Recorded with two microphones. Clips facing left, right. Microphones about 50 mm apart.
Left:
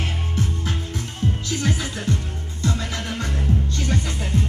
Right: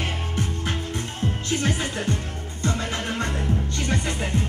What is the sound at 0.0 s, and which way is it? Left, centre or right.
Music, right.